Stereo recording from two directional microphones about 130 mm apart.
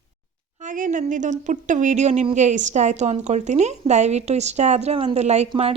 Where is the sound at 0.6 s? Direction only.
80° right; by 5.5 s 60° right (ahead or behind).